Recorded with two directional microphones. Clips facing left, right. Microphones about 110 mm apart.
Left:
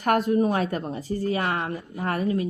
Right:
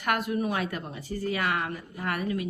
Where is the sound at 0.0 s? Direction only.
40° left (ahead or behind).